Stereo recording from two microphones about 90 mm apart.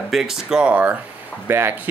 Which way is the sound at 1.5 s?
25° right (ahead or behind).